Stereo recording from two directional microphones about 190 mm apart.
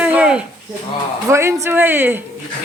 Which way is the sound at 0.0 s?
5° right (ahead or behind).